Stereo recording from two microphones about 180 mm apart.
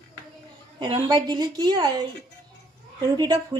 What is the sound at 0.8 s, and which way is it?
A woman's voice, 25° right (ahead or behind).